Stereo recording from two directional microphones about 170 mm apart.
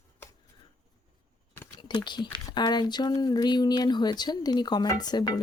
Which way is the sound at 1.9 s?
25° left (ahead or behind).